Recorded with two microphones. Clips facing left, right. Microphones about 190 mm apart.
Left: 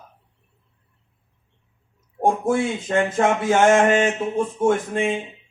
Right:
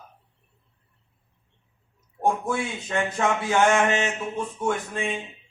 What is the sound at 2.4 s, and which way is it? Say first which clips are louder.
A man's voice: left 7 dB; 50° left (ahead or behind).